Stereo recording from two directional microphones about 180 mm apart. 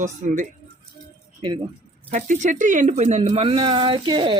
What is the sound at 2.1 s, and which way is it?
Speech, 45° right (ahead or behind).